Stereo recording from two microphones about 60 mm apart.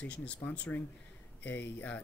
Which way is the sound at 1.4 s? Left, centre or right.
Left.